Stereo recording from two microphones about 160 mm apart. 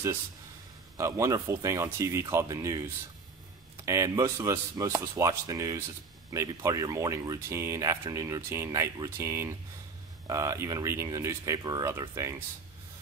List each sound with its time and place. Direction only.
0.9 s speech: 20° right (ahead or behind)